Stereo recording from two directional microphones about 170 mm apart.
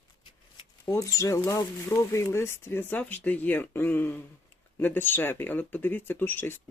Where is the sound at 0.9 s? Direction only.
20° left (ahead or behind).